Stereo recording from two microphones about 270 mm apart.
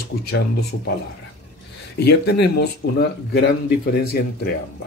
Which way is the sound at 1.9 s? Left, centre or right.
Left.